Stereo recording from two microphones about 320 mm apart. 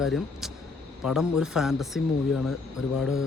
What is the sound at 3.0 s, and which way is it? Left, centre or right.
Speech, left.